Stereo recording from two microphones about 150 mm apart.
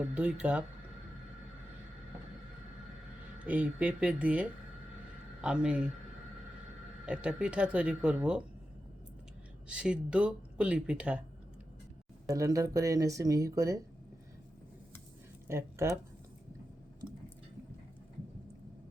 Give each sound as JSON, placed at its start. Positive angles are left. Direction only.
{"t": 0.0, "sound": "speech", "side_deg": -10}
{"t": 3.3, "sound": "speech", "side_deg": -10}
{"t": 7.0, "sound": "speech", "side_deg": -5}
{"t": 9.6, "sound": "speech", "side_deg": -5}
{"t": 12.3, "sound": "speech", "side_deg": -20}
{"t": 15.4, "sound": "speech", "side_deg": -15}